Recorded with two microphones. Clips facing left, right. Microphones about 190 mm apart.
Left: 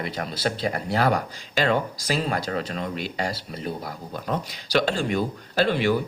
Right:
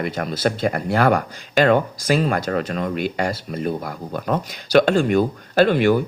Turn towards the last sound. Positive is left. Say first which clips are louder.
# right 6 dB
turn(degrees=-55)  # may be behind; listen again after turning